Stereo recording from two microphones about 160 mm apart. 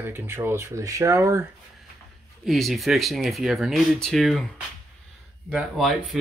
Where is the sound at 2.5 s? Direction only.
Centre (ahead or behind).